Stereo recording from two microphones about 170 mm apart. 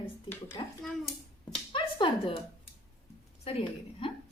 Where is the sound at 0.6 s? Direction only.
30° left (ahead or behind).